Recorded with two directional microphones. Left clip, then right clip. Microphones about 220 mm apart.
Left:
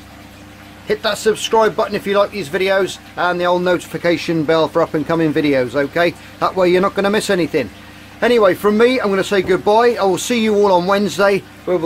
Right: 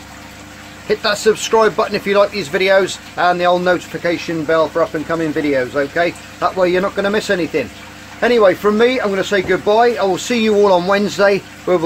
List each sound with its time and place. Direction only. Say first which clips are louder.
0.8 s speech: right 2 dB; 10° left (ahead or behind)
4.0 s speech: left 2 dB; 30° left (ahead or behind); by 11.4 s 15° left (ahead or behind)
11.7 s speech: right 3 dB; 5° right (ahead or behind)